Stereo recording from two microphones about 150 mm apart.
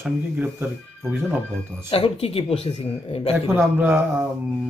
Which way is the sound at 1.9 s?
40° left (ahead or behind).